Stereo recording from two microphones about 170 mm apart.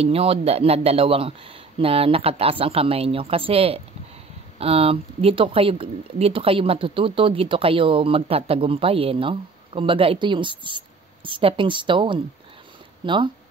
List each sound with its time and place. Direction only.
0.0 s speech: 35° right (ahead or behind)